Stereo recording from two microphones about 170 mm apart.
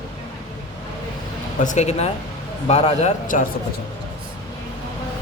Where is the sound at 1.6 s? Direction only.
45° left (ahead or behind).